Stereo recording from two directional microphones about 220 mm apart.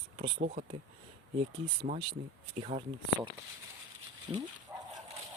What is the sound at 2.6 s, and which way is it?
Speech, 30° right (ahead or behind).